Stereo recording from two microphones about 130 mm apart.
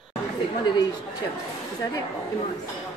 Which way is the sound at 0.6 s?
30° left (ahead or behind).